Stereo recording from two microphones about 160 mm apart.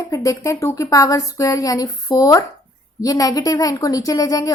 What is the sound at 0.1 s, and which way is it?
A woman's voice, 20° left (ahead or behind).